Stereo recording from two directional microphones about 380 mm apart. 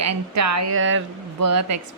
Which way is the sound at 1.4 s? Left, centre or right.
Right.